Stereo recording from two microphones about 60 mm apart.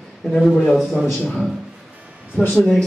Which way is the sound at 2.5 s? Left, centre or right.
Centre.